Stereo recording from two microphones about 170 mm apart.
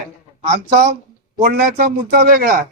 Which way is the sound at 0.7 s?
55° right (ahead or behind).